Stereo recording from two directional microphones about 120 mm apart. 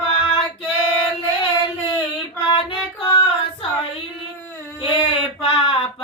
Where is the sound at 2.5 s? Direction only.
45° left (ahead or behind).